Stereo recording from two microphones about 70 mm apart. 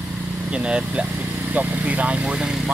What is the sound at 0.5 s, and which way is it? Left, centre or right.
Speech, centre.